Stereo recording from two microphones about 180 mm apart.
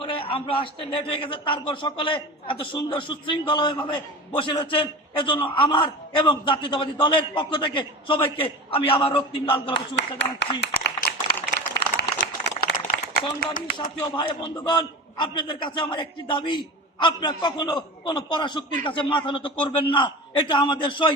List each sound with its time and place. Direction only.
0.0 s a man's voice: 30° left (ahead or behind)
9.7 s speech: 75° left (ahead or behind)
10.6 s a sound: 65° left (ahead or behind)
13.4 s speech: 50° left (ahead or behind)
13.7 s a man's voice: 25° left (ahead or behind)